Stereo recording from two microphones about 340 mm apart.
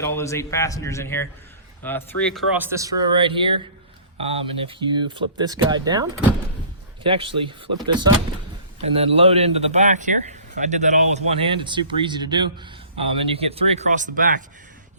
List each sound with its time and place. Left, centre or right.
0.0 s a man's voice: centre
9.0 s a man's voice: centre